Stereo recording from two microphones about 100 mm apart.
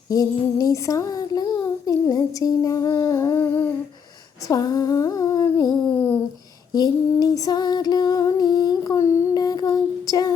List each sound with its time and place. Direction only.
0.1 s female singing: 35° left (ahead or behind)
4.4 s female singing: 40° left (ahead or behind)
6.7 s female singing: 40° left (ahead or behind)
9.4 s female singing: 40° left (ahead or behind)